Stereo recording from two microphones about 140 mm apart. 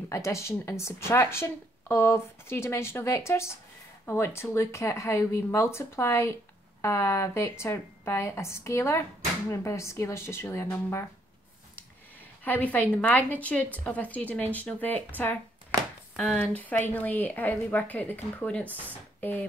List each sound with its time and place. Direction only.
0.1 s a woman's voice: 20° left (ahead or behind)
12.4 s a woman's voice: 10° left (ahead or behind)
16.2 s a woman's voice: 10° left (ahead or behind)
18.7 s speech: 10° right (ahead or behind)